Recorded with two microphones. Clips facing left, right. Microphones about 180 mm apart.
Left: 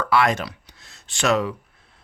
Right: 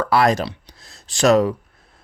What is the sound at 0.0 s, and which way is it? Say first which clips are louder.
Speech: right 3 dB; 35° right (ahead or behind).